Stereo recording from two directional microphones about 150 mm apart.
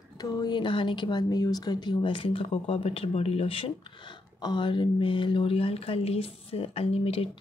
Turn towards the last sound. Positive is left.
turn(degrees=40)  # may be behind; listen again after turning